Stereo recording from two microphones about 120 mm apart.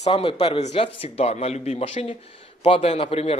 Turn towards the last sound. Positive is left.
turn(degrees=55)  # may be behind; listen again after turning